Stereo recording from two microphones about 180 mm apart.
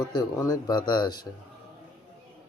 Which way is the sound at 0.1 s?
20° left (ahead or behind).